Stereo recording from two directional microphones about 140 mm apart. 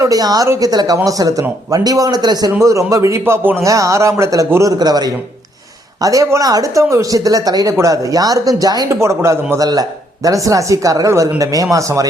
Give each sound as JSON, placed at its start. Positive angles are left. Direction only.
{"t": 0.0, "sound": "speech", "side_deg": -25}